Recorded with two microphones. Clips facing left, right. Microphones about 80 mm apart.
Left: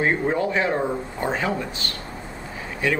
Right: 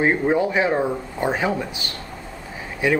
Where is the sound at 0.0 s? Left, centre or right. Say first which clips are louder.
Right 3 dB; centre.